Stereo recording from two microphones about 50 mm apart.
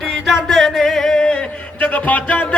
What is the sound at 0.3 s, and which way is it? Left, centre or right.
Singing, centre.